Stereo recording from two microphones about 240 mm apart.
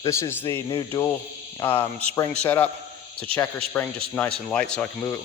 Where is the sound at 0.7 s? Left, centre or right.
Left.